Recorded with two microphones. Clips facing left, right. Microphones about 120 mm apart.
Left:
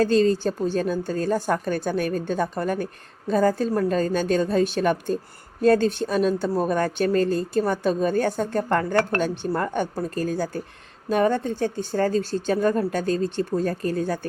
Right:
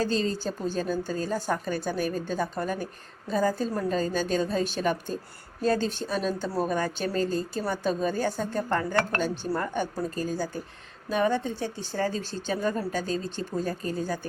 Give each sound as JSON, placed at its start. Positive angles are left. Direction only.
{"t": 0.0, "sound": "speech", "side_deg": 50}
{"t": 13.8, "sound": "speech", "side_deg": 60}